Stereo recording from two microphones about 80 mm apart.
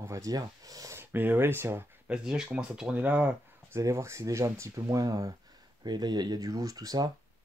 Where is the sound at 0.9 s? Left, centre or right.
Right.